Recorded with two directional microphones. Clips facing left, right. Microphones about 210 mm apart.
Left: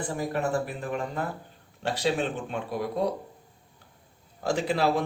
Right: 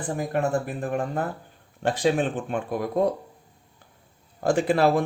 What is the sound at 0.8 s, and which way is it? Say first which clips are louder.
Speech: right 4 dB; 50° right (ahead or behind).